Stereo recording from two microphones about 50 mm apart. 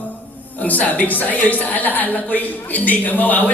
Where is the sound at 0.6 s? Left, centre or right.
Left.